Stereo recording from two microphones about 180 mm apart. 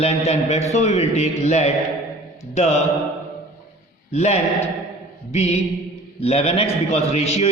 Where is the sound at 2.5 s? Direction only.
35° left (ahead or behind).